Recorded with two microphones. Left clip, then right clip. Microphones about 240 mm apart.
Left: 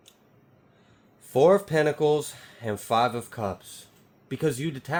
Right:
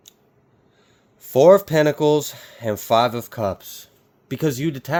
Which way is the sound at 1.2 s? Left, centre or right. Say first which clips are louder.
Right 7 dB; right.